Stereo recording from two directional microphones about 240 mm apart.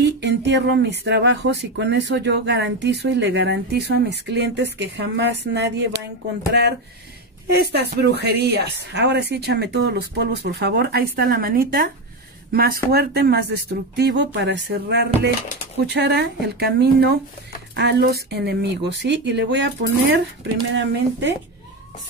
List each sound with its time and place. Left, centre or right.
0.0 s speech: right
7.4 s speech: right